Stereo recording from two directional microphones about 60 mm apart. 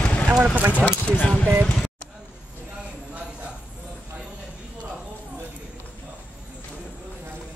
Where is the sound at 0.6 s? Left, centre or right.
Right.